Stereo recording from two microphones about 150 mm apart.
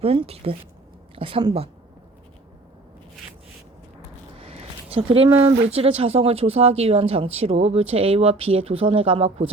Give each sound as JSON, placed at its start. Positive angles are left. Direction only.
{"t": 0.0, "sound": "speech", "side_deg": -40}
{"t": 4.4, "sound": "speech", "side_deg": -40}